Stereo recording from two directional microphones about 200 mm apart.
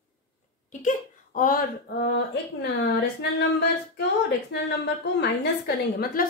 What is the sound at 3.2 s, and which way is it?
Music, 55° left (ahead or behind).